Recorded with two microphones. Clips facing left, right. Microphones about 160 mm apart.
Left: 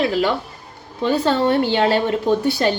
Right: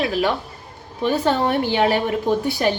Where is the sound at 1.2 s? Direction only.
15° right (ahead or behind).